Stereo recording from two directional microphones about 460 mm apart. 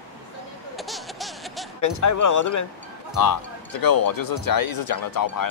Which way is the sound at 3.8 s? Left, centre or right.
Left.